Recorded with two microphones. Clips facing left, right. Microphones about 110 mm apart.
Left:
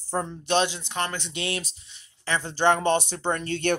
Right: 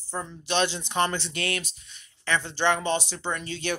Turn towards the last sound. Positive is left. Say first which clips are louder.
# left 5 dB
turn(degrees=55)  # may be behind; listen again after turning